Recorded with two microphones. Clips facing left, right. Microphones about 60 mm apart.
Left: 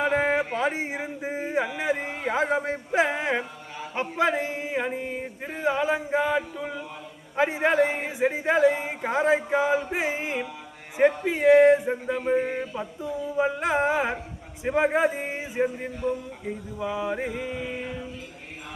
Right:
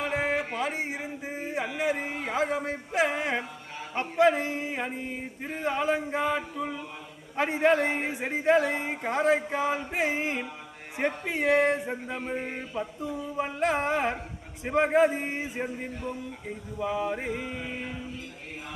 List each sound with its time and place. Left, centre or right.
0.3 s a sound: centre
0.6 s a man's voice: centre
1.6 s a man's voice: centre
2.3 s a man's voice: left; by 15.7 s centre
16.8 s a man's voice: centre